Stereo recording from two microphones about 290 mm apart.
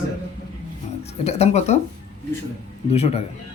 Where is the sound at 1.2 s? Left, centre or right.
Left.